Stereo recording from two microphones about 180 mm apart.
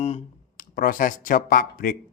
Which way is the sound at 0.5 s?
50° left (ahead or behind).